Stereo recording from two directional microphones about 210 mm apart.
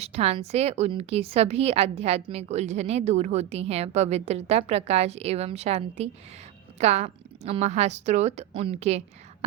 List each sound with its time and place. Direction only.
0.0 s a woman's voice: 30° right (ahead or behind)